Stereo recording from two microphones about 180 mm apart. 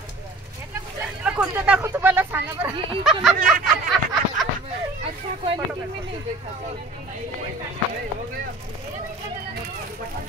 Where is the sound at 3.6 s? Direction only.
Centre (ahead or behind).